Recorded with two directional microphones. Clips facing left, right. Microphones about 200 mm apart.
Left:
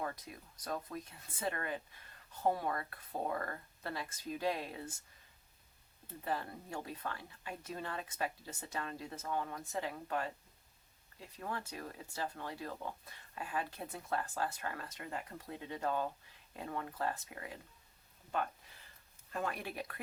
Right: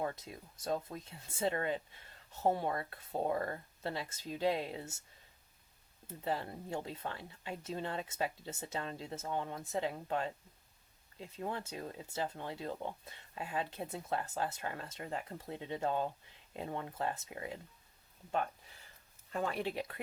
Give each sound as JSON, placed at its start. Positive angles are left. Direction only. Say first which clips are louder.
{"t": 0.0, "sound": "speech", "louder": "right 3 dB", "side_deg": -25}
{"t": 6.2, "sound": "speech", "louder": "right 2 dB", "side_deg": -25}
{"t": 19.3, "sound": "speech", "louder": "right 4 dB", "side_deg": -25}